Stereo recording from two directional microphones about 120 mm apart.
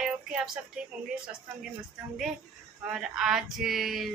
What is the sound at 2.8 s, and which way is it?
A woman's voice, 5° right (ahead or behind).